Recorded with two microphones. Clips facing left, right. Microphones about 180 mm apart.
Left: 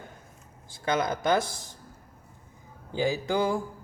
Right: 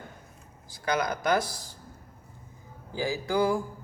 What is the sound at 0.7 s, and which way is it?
Speech, 25° left (ahead or behind).